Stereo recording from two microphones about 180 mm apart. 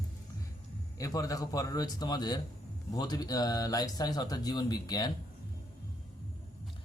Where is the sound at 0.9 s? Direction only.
20° left (ahead or behind).